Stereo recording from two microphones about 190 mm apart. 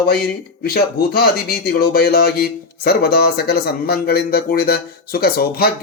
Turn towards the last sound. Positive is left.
turn(degrees=55)  # may be behind; listen again after turning